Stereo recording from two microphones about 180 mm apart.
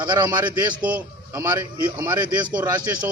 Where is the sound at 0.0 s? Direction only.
25° right (ahead or behind).